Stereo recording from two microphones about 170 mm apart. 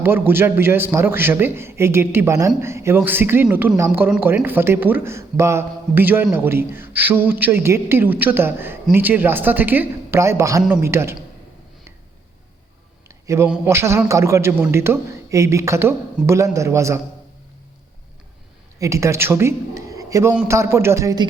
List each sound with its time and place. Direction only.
0.0 s a man's voice: 15° right (ahead or behind)
13.1 s a sound: 15° right (ahead or behind)
13.7 s a man's voice: 15° right (ahead or behind)
18.8 s a man's voice: 15° right (ahead or behind)